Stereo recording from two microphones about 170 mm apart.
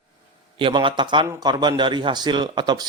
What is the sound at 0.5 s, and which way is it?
Speech, 30° right (ahead or behind).